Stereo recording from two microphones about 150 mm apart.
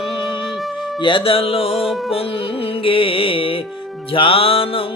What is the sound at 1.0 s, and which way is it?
Music, 35° left (ahead or behind).